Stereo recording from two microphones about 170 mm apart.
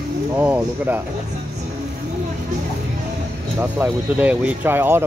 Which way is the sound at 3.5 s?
10° right (ahead or behind).